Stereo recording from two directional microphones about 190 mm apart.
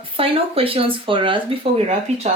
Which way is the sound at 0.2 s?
30° right (ahead or behind).